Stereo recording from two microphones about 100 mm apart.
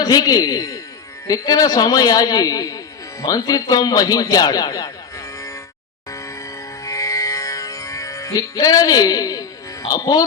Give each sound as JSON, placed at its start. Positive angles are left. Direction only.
{"t": 0.0, "sound": "a man's voice", "side_deg": 40}
{"t": 6.1, "sound": "music", "side_deg": 30}